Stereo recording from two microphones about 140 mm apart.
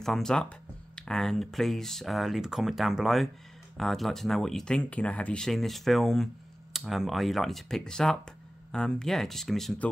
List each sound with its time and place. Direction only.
0.0 s speech: 5° left (ahead or behind)